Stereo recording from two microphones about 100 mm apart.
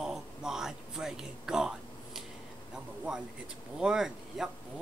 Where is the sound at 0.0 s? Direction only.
5° right (ahead or behind).